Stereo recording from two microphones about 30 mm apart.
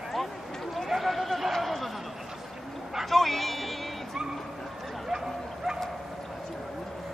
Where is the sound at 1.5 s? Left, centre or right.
Centre.